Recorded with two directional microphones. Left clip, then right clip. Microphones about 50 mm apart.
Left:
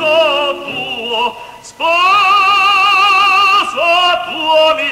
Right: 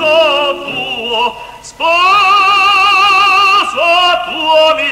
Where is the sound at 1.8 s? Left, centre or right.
Left.